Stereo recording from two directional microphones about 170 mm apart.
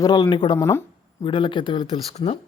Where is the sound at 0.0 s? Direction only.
25° left (ahead or behind).